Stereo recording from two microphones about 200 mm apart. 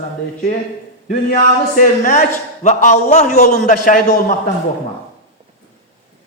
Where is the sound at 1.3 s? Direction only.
40° left (ahead or behind).